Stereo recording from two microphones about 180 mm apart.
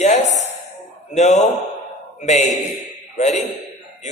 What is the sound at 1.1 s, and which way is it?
A man's voice, 40° left (ahead or behind).